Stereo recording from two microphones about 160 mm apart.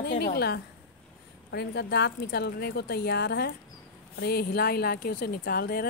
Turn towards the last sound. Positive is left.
turn(degrees=70)  # may be behind; listen again after turning